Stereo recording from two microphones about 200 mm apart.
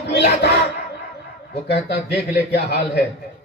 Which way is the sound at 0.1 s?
55° left (ahead or behind).